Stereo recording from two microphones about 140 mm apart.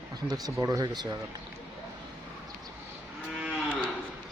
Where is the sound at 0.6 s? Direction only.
25° right (ahead or behind).